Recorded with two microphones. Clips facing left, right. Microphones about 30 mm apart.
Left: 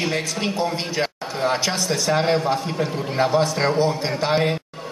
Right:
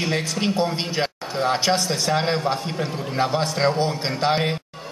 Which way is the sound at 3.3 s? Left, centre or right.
Right.